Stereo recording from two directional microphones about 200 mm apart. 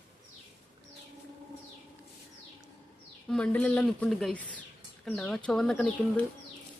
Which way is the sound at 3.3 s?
5° left (ahead or behind).